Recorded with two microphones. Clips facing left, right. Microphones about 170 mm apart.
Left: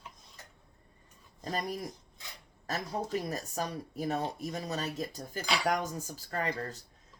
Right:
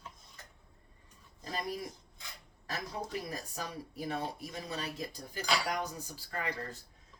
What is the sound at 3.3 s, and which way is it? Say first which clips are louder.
Speech: left 5 dB; 45° left (ahead or behind).